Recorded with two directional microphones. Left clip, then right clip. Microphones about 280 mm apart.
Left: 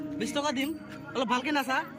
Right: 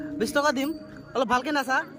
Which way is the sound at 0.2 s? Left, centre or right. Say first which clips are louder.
Right 7 dB; centre.